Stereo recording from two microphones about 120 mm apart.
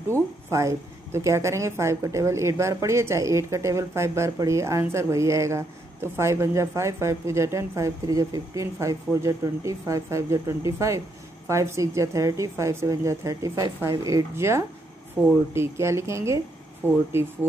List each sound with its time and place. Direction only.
0.1 s speech: 25° right (ahead or behind)